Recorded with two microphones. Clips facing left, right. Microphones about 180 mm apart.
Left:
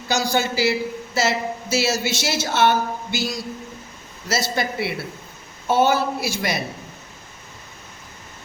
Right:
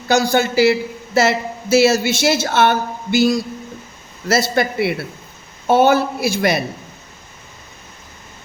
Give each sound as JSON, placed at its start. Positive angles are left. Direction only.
{"t": 0.1, "sound": "a woman's voice", "side_deg": -55}